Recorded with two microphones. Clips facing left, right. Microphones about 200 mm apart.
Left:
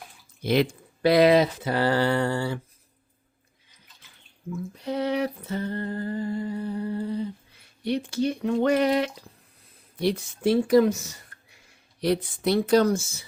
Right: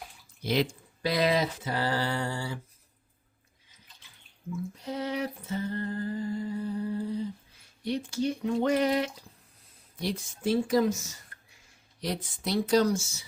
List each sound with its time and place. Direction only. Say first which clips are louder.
0.4 s speech: left 5 dB; 60° left (ahead or behind)
4.8 s a sound: left 7 dB; 65° left (ahead or behind)
7.9 s speech: left 4 dB; 70° left (ahead or behind)